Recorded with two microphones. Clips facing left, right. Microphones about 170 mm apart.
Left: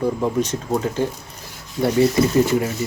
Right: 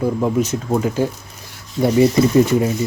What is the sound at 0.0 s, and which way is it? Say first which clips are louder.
Speech: right 2 dB; 5° right (ahead or behind).